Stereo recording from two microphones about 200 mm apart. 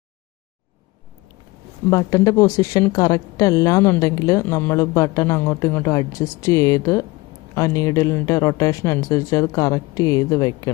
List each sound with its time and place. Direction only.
1.9 s speech: 15° left (ahead or behind)